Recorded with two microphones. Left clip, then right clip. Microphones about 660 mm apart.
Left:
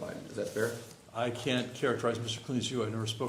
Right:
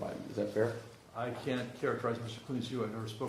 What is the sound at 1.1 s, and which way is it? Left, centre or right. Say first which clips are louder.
A man's voice: left 5 dB; left.